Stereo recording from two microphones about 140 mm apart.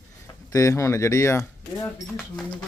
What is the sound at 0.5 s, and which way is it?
Speech, 20° left (ahead or behind).